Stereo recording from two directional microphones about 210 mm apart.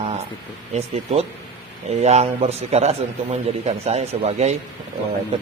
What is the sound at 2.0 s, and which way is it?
A man's voice, 30° right (ahead or behind).